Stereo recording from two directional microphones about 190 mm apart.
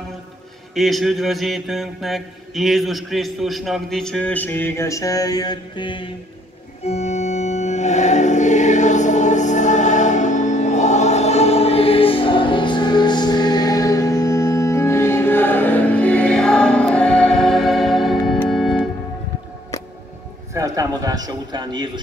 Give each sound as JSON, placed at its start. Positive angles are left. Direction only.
{"t": 0.7, "sound": "mantra", "side_deg": 0}
{"t": 6.9, "sound": "organ", "side_deg": 35}
{"t": 20.5, "sound": "a man's voice", "side_deg": -20}